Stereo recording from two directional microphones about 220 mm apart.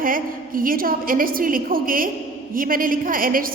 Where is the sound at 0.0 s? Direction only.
40° right (ahead or behind).